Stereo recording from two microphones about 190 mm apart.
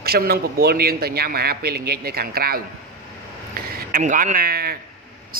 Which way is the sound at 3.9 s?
45° right (ahead or behind).